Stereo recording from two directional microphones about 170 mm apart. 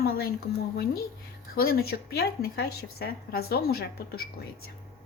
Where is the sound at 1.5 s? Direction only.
60° left (ahead or behind).